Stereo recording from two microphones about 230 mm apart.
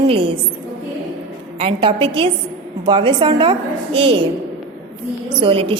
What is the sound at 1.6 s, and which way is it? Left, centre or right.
A woman's voice, right.